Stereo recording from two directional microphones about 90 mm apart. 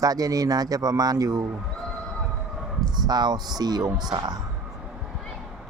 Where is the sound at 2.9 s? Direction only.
50° right (ahead or behind).